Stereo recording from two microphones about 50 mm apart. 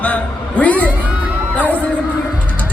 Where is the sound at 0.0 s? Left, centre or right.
Left.